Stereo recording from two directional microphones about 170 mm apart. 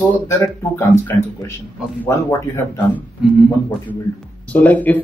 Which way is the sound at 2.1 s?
15° left (ahead or behind).